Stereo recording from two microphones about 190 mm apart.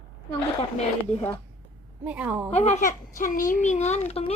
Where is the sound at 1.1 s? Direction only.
35° left (ahead or behind).